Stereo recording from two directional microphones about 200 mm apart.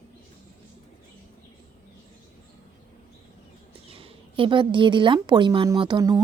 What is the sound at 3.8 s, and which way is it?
Speech, 30° right (ahead or behind).